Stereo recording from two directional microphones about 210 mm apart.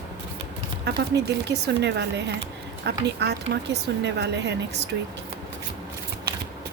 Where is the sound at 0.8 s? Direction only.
55° right (ahead or behind).